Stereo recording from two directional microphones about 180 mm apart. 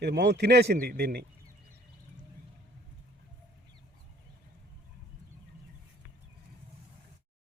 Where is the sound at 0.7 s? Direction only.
55° right (ahead or behind).